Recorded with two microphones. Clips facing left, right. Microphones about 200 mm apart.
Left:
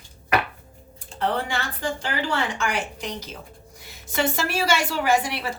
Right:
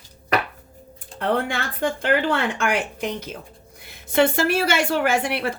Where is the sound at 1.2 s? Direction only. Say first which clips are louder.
Right 3 dB; 55° right (ahead or behind).